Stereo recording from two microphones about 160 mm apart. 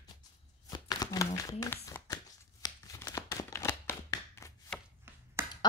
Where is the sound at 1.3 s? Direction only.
20° left (ahead or behind).